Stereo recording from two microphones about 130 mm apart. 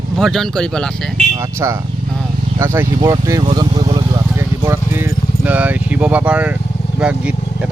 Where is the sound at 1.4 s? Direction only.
20° right (ahead or behind).